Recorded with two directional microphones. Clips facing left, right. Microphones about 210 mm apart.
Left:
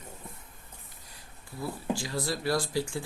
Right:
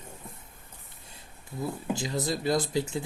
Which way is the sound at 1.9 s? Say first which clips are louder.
Right 1 dB; 20° right (ahead or behind).